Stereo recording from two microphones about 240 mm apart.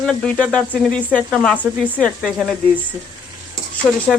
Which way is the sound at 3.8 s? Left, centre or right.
Centre.